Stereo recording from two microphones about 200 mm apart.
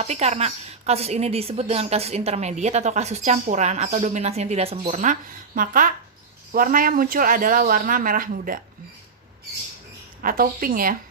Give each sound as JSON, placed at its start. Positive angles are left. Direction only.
{"t": 0.0, "sound": "a woman's voice", "side_deg": -35}
{"t": 10.2, "sound": "speech", "side_deg": -45}